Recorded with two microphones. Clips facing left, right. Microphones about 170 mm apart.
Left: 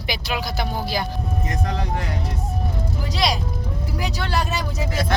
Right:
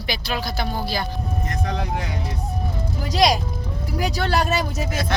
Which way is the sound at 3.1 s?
45° right (ahead or behind).